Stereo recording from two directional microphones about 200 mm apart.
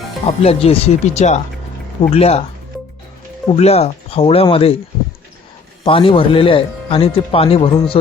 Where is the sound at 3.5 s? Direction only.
30° left (ahead or behind).